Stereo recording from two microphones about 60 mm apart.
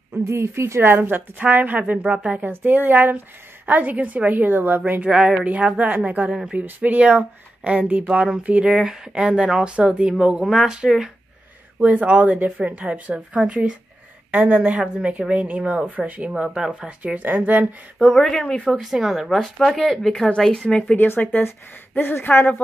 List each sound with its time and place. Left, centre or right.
0.2 s speech: right
0.9 s a woman's voice: right
2.5 s a woman's voice: right
5.0 s a woman's voice: centre
11.8 s a woman's voice: right
16.4 s a woman's voice: centre; by 17.6 s right
18.1 s speech: centre
18.6 s speech: centre
20.9 s speech: left